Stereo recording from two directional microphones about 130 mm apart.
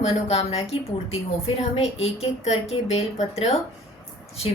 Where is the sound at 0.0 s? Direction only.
50° left (ahead or behind).